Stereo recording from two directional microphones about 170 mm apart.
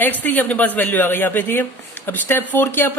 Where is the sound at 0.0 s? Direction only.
10° left (ahead or behind).